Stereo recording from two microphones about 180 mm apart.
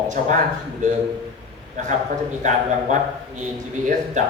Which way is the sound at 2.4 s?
40° right (ahead or behind).